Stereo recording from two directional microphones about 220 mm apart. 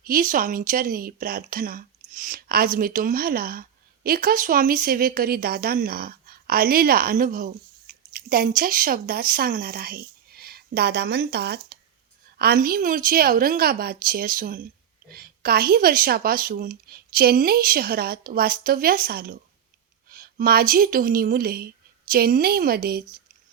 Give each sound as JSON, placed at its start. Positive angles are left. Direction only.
{"t": 0.0, "sound": "a woman's voice", "side_deg": -40}